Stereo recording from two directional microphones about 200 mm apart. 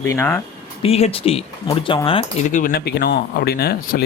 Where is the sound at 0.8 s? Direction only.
30° left (ahead or behind).